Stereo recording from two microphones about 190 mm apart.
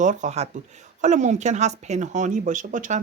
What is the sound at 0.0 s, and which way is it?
Speech, 40° right (ahead or behind).